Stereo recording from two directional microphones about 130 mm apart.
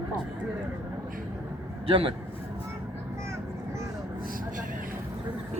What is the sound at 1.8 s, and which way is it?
Speech, 45° right (ahead or behind).